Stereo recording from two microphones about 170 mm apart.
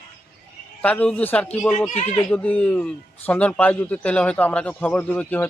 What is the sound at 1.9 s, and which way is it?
Speech, 40° left (ahead or behind).